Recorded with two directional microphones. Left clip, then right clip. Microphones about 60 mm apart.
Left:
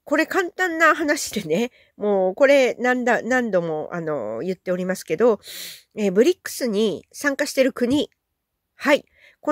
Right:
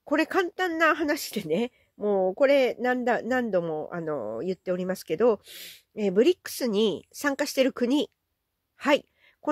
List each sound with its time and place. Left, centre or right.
0.0 s speech: centre
2.0 s a man's voice: left
6.4 s speech: centre
8.7 s sigh: centre